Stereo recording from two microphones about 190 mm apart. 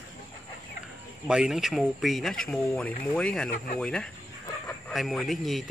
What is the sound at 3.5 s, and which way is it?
Speech, 50° left (ahead or behind).